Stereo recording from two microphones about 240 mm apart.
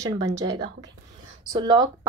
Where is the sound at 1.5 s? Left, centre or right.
Centre.